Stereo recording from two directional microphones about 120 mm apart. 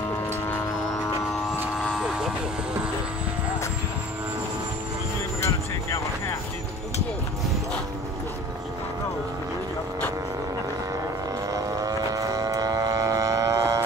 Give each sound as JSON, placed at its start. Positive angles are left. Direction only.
{"t": 1.3, "sound": "vehicle", "side_deg": 0}
{"t": 5.4, "sound": "vehicle", "side_deg": 25}
{"t": 11.5, "sound": "vehicle", "side_deg": -30}